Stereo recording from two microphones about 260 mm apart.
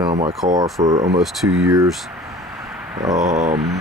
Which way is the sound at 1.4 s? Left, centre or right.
Right.